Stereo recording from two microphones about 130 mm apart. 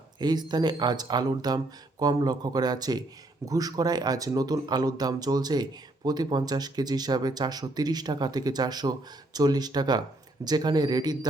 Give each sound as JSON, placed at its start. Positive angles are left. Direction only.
{"t": 0.2, "sound": "speech", "side_deg": -30}